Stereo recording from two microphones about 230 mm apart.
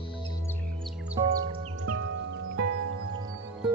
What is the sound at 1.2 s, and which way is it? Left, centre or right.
Music, right.